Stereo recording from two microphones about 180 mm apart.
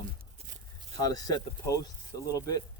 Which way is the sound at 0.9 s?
20° left (ahead or behind).